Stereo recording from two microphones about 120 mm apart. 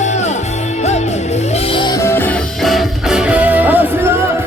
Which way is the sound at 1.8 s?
35° left (ahead or behind).